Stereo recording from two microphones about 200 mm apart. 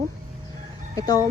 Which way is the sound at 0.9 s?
15° left (ahead or behind).